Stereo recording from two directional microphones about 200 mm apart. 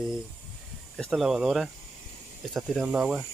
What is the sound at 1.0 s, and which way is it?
Speech, centre (ahead or behind).